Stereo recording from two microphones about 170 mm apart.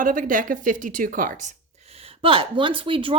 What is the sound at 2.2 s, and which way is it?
Speech, 30° right (ahead or behind).